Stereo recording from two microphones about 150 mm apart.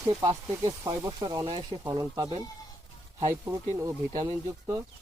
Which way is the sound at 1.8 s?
25° right (ahead or behind).